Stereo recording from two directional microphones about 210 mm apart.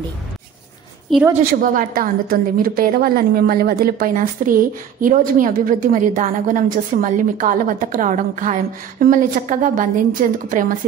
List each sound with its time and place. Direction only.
1.6 s a woman's voice: 40° right (ahead or behind)